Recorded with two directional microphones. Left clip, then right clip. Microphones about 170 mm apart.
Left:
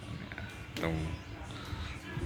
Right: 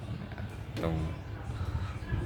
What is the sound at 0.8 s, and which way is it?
Speech, centre (ahead or behind).